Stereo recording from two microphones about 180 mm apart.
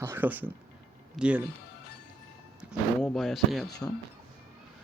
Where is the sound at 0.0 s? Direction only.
10° right (ahead or behind).